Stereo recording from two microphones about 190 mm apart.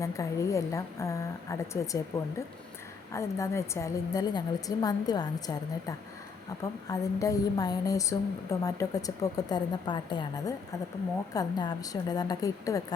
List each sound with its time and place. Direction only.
0.0 s a woman's voice: 15° left (ahead or behind)
3.1 s a woman's voice: 15° left (ahead or behind)
6.6 s a woman's voice: 20° left (ahead or behind)